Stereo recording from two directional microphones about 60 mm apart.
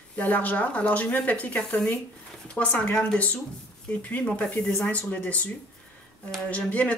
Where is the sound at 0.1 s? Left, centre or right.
Left.